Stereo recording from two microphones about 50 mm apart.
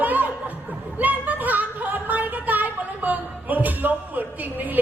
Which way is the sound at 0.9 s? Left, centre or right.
Right.